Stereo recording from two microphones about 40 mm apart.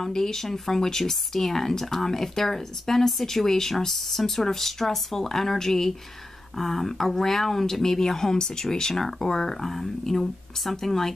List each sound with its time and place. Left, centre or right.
0.0 s speech: centre